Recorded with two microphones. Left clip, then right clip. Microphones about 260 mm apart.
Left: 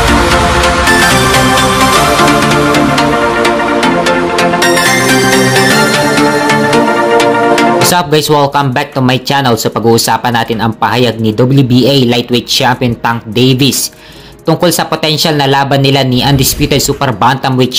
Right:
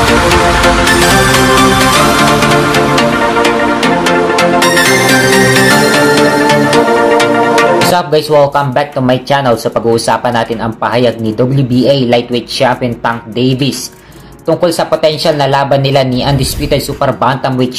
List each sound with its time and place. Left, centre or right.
7.9 s music: left
8.5 s speech: left
9.5 s speech: left
13.4 s speech: left
17.0 s speech: left